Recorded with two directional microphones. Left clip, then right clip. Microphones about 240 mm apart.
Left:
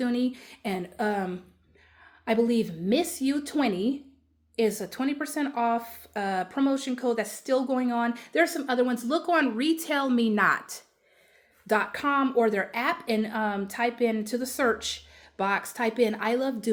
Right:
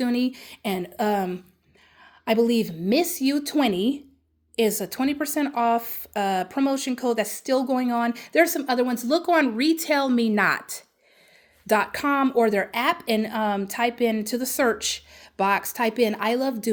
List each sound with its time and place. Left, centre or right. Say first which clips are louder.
0.0 s speech: right 3 dB; right